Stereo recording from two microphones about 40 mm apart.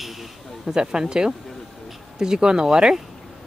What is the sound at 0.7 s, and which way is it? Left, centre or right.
Speech, centre.